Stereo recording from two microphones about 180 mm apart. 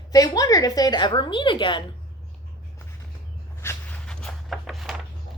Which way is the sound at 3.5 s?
15° left (ahead or behind).